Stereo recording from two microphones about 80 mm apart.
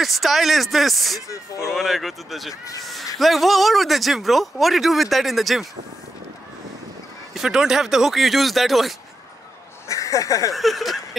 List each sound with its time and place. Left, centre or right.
0.0 s speech: centre
2.8 s cat: centre
3.2 s speech: centre
7.3 s speech: centre
9.8 s speech: left
10.5 s speech: centre